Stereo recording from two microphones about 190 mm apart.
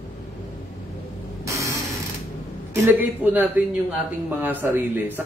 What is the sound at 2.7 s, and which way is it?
Speech, 10° right (ahead or behind).